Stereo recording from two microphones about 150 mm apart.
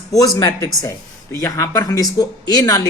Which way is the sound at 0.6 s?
20° left (ahead or behind).